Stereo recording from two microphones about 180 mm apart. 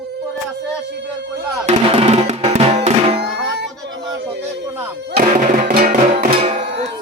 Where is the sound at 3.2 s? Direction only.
70° right (ahead or behind).